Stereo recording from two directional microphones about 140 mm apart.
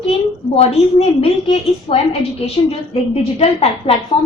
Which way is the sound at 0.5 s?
45° left (ahead or behind).